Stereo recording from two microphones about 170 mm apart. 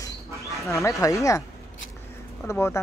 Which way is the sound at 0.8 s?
20° left (ahead or behind).